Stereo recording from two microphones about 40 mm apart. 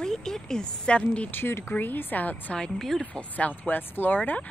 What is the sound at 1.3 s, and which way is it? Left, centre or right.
Speech, left.